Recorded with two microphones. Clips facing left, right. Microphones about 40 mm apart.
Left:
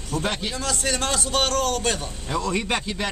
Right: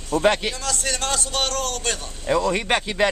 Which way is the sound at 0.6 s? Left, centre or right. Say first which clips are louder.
Left 1 dB; centre.